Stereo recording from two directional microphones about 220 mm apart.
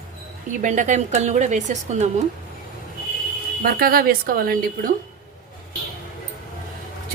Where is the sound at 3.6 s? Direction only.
40° right (ahead or behind).